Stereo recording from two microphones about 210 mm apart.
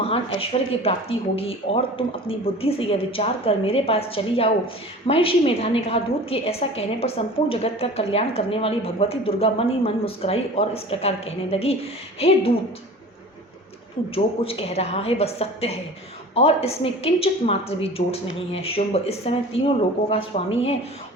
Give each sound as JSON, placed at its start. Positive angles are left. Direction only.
{"t": 0.0, "sound": "a woman's voice", "side_deg": 25}
{"t": 14.4, "sound": "a woman's voice", "side_deg": 30}